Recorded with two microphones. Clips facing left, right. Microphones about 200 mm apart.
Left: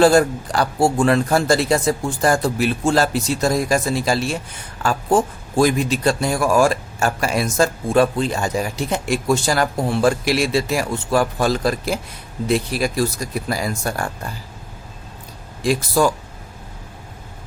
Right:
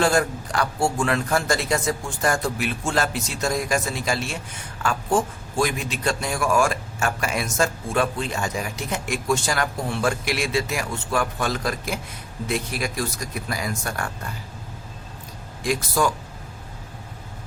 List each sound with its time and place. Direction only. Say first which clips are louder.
0.0 s a man's voice: left 7 dB; 35° left (ahead or behind)
15.6 s a man's voice: left 5 dB; 30° left (ahead or behind)